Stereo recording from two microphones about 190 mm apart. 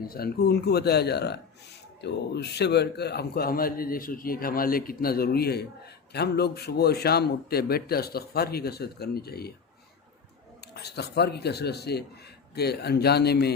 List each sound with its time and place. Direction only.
0.1 s a man's voice: 55° left (ahead or behind)
10.8 s speech: 60° left (ahead or behind)